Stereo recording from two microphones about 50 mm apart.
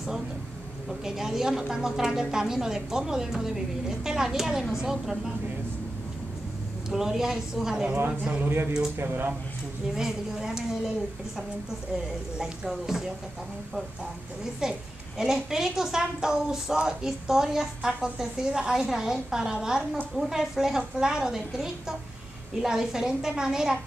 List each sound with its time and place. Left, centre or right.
1.0 s a woman's voice: centre
6.9 s a woman's voice: centre
8.4 s speech: right
9.9 s a woman's voice: centre
12.6 s a woman's voice: centre
14.4 s a woman's voice: centre